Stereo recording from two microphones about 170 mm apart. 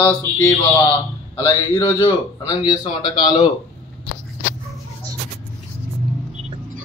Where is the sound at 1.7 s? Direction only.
25° left (ahead or behind).